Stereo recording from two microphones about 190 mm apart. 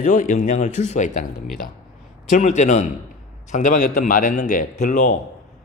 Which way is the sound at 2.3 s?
40° left (ahead or behind).